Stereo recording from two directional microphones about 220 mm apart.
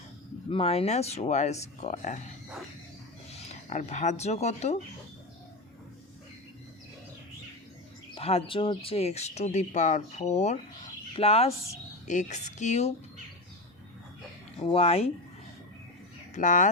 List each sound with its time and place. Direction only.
0.5 s speech: 25° left (ahead or behind)
3.3 s speech: 35° left (ahead or behind)
8.1 s speech: 25° left (ahead or behind)
14.6 s speech: 25° left (ahead or behind)
16.3 s speech: 35° left (ahead or behind)